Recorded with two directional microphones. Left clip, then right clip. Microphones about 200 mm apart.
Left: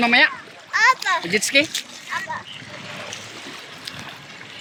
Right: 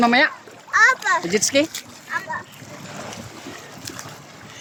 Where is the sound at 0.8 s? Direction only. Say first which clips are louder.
Right 1 dB; 35° right (ahead or behind).